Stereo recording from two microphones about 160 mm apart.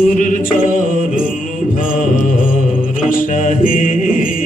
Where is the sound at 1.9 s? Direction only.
55° left (ahead or behind).